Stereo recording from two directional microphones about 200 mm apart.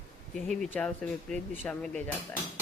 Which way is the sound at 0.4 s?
Centre (ahead or behind).